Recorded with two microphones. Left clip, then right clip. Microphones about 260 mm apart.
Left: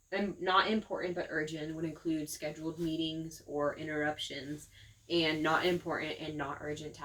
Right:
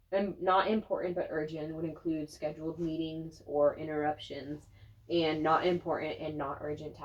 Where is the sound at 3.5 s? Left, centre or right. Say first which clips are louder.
Right 6 dB; left.